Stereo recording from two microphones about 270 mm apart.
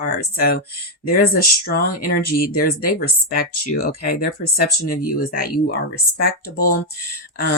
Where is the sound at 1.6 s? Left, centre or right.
Left.